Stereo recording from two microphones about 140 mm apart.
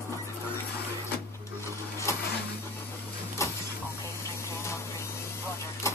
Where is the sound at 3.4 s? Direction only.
20° left (ahead or behind).